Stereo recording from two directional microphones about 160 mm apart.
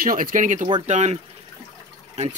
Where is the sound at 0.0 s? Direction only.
60° right (ahead or behind).